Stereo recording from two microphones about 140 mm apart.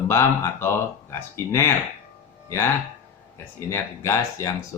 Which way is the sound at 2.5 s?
20° left (ahead or behind).